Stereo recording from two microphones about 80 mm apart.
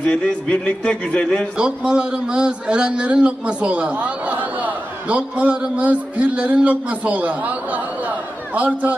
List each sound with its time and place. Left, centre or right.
0.0 s speech: centre
1.6 s a man's voice: centre